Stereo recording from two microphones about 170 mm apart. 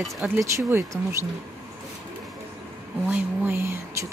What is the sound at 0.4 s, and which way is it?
Speech, 15° right (ahead or behind).